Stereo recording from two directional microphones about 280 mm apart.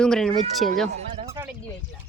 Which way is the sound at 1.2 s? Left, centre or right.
Centre.